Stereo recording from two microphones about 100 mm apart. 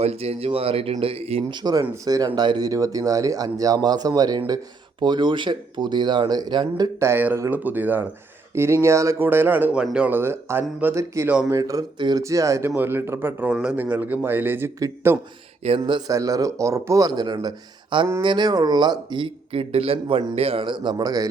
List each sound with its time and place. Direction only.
0.0 s speech: 90° right
1.5 s speech: 40° right (ahead or behind)
7.0 s speech: 20° right (ahead or behind)
9.8 s speech: 10° right (ahead or behind)
10.1 s speech: 25° right (ahead or behind)
10.9 s speech: 30° right (ahead or behind)
11.9 s speech: 45° right (ahead or behind)
12.2 s speech: 30° right (ahead or behind)
13.5 s speech: 10° right (ahead or behind)
15.9 s speech: 45° right (ahead or behind)
16.1 s speech: 35° right (ahead or behind)
17.1 s speech: 45° right (ahead or behind)